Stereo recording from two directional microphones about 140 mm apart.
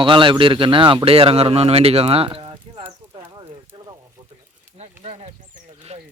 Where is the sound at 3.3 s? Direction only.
30° right (ahead or behind).